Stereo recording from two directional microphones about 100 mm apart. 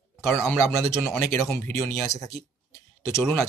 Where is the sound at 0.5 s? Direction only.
25° left (ahead or behind).